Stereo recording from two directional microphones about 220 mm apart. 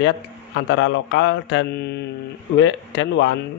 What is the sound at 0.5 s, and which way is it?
A man's voice, 60° left (ahead or behind).